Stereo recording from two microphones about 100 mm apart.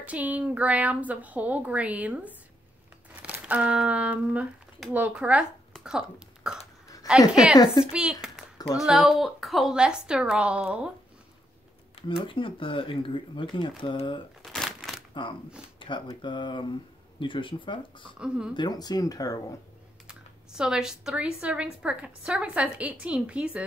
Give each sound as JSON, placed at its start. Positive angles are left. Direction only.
{"t": 0.0, "sound": "speech", "side_deg": -15}
{"t": 5.9, "sound": "burping", "side_deg": -10}
{"t": 7.0, "sound": "a sound", "side_deg": 40}
{"t": 7.5, "sound": "speech", "side_deg": 45}
{"t": 7.8, "sound": "speech", "side_deg": -10}
{"t": 8.5, "sound": "speech", "side_deg": 40}
{"t": 8.8, "sound": "speech", "side_deg": 0}
{"t": 12.2, "sound": "speech", "side_deg": 60}
{"t": 14.4, "sound": "crumpling", "side_deg": 0}
{"t": 15.8, "sound": "a sound", "side_deg": 55}
{"t": 16.2, "sound": "speech", "side_deg": 55}
{"t": 18.2, "sound": "speech", "side_deg": -10}
{"t": 18.5, "sound": "speech", "side_deg": 45}
{"t": 20.1, "sound": "speech", "side_deg": -5}